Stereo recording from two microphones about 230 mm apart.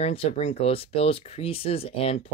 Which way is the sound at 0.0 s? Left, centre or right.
Left.